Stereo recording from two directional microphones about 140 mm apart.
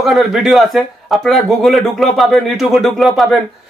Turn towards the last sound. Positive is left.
turn(degrees=0)  # may be behind; listen again after turning